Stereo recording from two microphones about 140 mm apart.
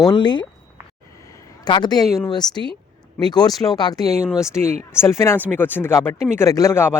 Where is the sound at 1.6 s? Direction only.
30° left (ahead or behind).